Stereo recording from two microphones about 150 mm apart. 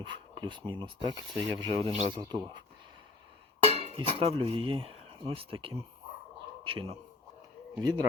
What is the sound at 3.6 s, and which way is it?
A man's voice, 40° right (ahead or behind).